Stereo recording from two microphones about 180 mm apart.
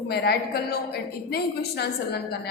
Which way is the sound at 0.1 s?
60° left (ahead or behind).